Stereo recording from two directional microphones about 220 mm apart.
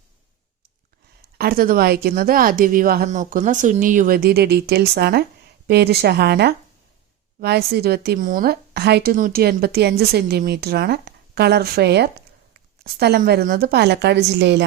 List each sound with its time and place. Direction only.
1.4 s a woman's voice: 40° right (ahead or behind)